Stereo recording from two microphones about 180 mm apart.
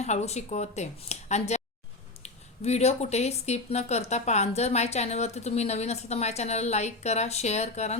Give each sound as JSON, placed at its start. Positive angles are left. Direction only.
{"t": 0.0, "sound": "speech", "side_deg": 40}